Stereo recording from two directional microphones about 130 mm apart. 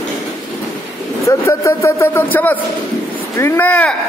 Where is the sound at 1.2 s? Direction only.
20° left (ahead or behind).